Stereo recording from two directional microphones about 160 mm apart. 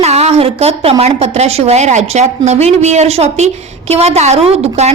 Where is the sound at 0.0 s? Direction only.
40° right (ahead or behind).